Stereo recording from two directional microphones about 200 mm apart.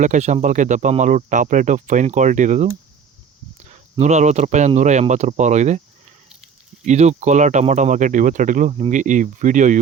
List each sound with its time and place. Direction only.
0.0 s speech: 40° right (ahead or behind)